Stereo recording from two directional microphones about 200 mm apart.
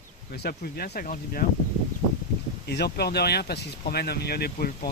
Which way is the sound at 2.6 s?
55° left (ahead or behind).